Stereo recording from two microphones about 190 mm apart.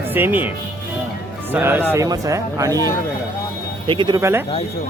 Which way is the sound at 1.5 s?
10° right (ahead or behind).